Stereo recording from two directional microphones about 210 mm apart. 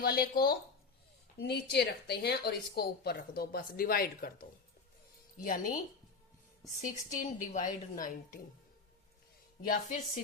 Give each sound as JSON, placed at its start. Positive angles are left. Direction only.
{"t": 0.0, "sound": "a woman's voice", "side_deg": 45}
{"t": 6.8, "sound": "a woman's voice", "side_deg": 40}